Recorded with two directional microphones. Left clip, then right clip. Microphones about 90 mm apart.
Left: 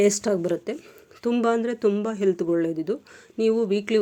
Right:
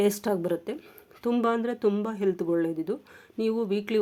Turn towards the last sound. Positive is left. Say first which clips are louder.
# left 5 dB
turn(degrees=30)  # may be behind; listen again after turning